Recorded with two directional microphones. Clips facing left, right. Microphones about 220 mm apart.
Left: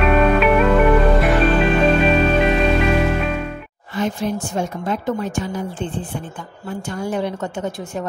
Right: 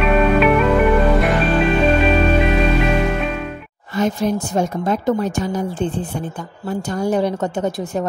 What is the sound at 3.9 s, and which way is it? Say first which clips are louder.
A woman's voice: right 3 dB; 40° right (ahead or behind).